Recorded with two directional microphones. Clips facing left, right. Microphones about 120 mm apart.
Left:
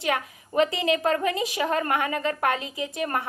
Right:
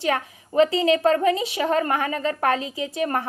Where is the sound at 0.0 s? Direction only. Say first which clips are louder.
Right 3 dB; 30° right (ahead or behind).